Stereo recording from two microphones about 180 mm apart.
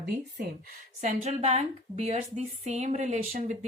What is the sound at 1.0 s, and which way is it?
A woman's voice, 40° right (ahead or behind).